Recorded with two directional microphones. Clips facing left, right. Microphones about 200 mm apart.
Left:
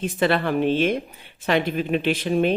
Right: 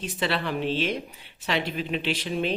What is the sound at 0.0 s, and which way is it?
Speech, 50° left (ahead or behind).